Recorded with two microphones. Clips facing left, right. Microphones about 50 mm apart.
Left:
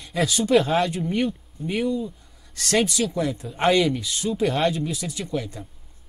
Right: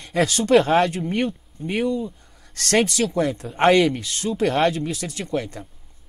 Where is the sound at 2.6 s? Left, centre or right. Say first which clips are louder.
Right 2 dB; right.